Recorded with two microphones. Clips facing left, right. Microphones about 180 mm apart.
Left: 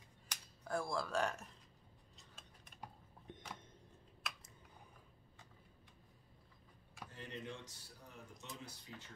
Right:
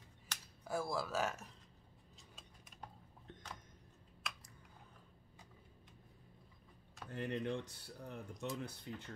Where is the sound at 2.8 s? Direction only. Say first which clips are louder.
Left 1 dB; 10° left (ahead or behind).